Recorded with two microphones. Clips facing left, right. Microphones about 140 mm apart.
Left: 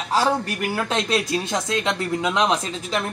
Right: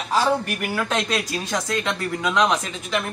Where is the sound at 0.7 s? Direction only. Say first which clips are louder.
Left 1 dB; 25° left (ahead or behind).